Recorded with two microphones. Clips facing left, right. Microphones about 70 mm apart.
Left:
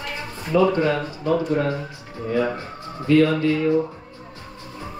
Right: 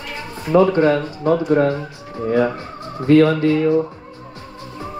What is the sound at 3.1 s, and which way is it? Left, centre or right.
Speech, right.